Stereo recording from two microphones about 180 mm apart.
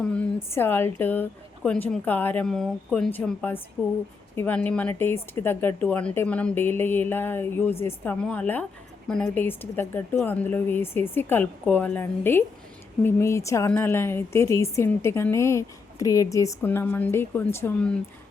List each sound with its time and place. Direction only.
0.0 s a woman's voice: 5° left (ahead or behind)